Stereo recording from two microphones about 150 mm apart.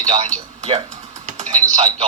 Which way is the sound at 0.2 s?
50° right (ahead or behind).